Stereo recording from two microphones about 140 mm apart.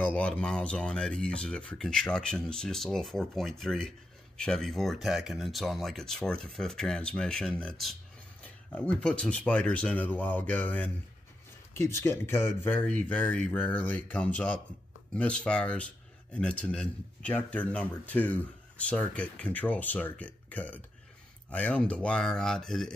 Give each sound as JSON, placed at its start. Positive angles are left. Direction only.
{"t": 0.0, "sound": "speech", "side_deg": 10}